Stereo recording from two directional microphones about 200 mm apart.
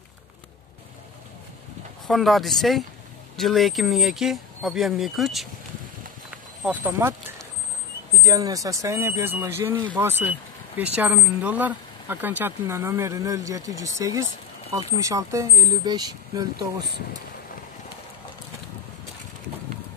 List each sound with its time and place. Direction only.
2.0 s speech: centre (ahead or behind)
6.6 s speech: 10° right (ahead or behind)
8.2 s speech: 15° right (ahead or behind)